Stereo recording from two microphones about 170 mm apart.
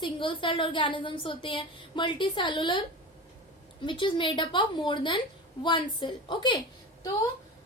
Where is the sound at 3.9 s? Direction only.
30° left (ahead or behind).